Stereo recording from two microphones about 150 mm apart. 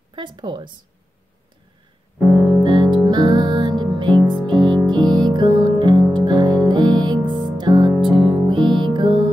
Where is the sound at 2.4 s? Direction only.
30° right (ahead or behind).